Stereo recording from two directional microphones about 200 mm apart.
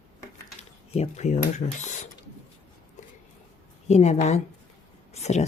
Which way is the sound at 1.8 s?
40° left (ahead or behind).